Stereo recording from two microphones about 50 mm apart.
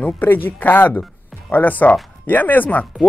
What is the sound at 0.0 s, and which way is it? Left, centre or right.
Speech, left.